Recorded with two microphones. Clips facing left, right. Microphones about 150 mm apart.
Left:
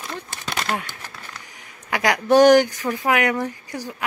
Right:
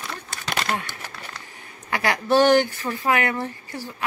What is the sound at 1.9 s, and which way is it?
Speech, 15° left (ahead or behind).